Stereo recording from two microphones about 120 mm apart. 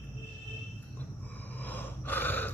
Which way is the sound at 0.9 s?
15° left (ahead or behind).